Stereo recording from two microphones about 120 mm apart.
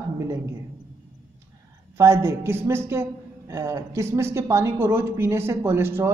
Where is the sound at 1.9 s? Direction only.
25° right (ahead or behind).